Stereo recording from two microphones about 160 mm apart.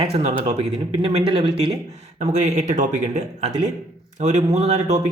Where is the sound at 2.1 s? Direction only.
45° right (ahead or behind).